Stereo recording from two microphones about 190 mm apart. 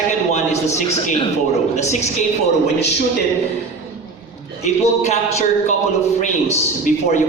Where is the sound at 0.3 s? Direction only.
35° left (ahead or behind).